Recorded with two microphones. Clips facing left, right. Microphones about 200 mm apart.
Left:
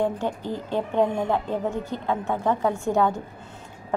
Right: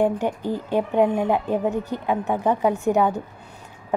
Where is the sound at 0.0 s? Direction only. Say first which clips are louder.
Right 4 dB; 15° right (ahead or behind).